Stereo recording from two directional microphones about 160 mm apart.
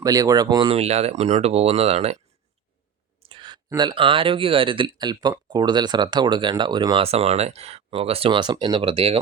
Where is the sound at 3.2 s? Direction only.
30° right (ahead or behind).